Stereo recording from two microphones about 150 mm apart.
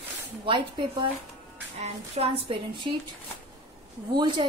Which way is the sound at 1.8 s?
45° right (ahead or behind).